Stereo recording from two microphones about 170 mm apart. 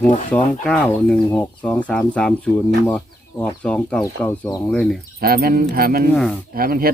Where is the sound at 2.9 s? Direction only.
5° left (ahead or behind).